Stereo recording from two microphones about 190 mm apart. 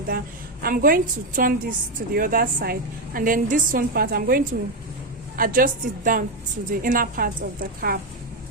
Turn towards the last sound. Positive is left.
turn(degrees=-50)  # may be behind; listen again after turning